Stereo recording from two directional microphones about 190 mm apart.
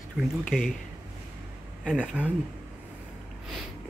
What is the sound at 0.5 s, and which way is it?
Speech, 5° right (ahead or behind).